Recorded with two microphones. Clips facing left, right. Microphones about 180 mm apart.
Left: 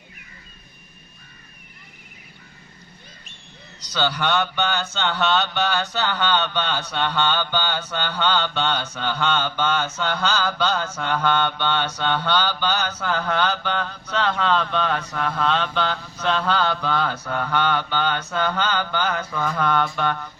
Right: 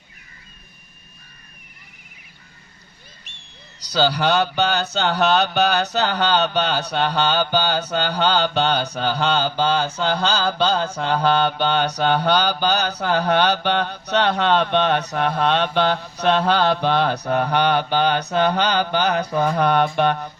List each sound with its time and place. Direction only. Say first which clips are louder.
3.8 s speech: right 5 dB; 35° right (ahead or behind)
14.6 s speech: right 5 dB; 70° right (ahead or behind)
15.3 s speech: right 2 dB; 40° right (ahead or behind)